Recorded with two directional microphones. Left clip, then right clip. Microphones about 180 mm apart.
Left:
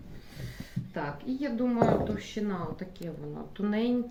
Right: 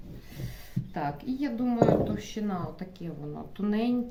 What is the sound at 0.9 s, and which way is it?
Speech, 70° right (ahead or behind).